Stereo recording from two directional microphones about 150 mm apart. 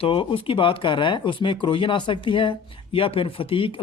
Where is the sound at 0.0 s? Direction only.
35° left (ahead or behind).